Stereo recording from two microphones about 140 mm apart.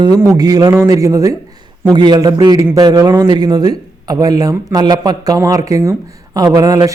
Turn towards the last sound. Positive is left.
turn(degrees=-25)  # may be behind; listen again after turning